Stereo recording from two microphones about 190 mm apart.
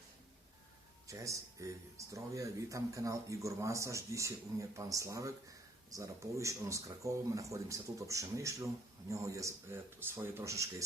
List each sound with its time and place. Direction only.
1.0 s speech: 15° right (ahead or behind)